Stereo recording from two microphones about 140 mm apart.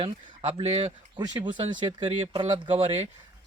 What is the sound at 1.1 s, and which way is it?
Speech, 30° right (ahead or behind).